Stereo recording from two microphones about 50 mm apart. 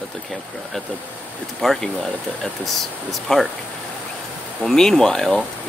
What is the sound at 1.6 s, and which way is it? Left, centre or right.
Speech, centre.